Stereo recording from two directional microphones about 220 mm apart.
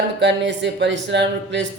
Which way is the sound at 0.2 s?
55° right (ahead or behind).